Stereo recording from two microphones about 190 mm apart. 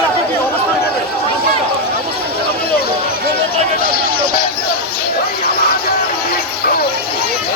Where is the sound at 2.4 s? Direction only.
55° left (ahead or behind).